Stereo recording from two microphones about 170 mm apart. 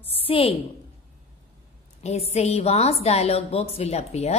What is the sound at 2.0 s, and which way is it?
A woman's voice, 40° left (ahead or behind).